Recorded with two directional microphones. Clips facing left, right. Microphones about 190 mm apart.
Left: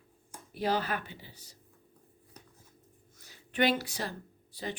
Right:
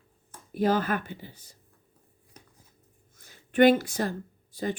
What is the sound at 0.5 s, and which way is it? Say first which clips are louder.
Speech: right 6 dB; 50° right (ahead or behind).